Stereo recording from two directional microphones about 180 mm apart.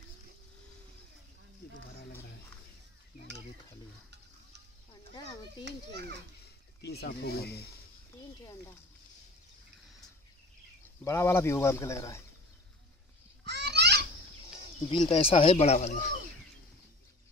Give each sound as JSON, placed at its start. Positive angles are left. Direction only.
{"t": 6.8, "sound": "speech", "side_deg": 65}
{"t": 8.4, "sound": "speech", "side_deg": 20}
{"t": 11.1, "sound": "speech", "side_deg": 15}
{"t": 13.5, "sound": "children playing", "side_deg": -70}
{"t": 14.9, "sound": "speech", "side_deg": 30}